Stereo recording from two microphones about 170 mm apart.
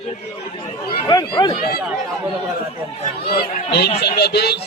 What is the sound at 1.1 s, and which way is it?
Speech, 25° left (ahead or behind).